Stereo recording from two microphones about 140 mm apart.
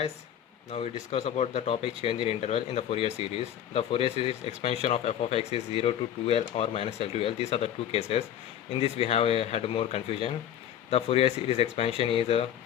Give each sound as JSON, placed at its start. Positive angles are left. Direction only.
{"t": 0.7, "sound": "speech", "side_deg": 45}